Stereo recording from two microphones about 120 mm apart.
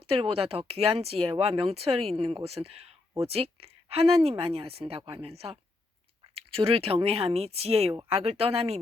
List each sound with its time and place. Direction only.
0.1 s speech: 55° right (ahead or behind)